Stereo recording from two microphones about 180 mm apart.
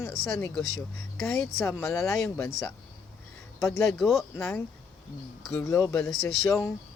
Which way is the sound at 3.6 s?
15° left (ahead or behind).